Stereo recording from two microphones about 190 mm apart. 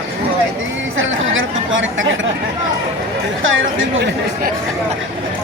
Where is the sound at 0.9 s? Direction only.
90° right.